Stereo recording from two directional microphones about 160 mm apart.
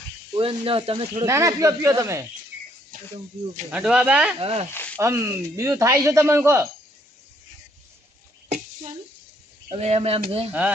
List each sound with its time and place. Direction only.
0.3 s speech: 35° right (ahead or behind)
1.2 s speech: 20° right (ahead or behind)
2.9 s a sound: 60° right (ahead or behind)
3.7 s speech: 5° right (ahead or behind)
4.4 s speech: 35° right (ahead or behind)
4.7 s a sound: 10° left (ahead or behind)
4.9 s speech: 15° right (ahead or behind)
9.7 s speech: 40° right (ahead or behind)